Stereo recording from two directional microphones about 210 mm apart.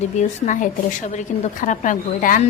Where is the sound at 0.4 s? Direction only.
35° left (ahead or behind).